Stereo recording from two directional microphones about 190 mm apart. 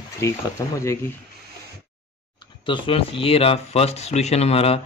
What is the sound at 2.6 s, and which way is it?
Speech, 25° left (ahead or behind).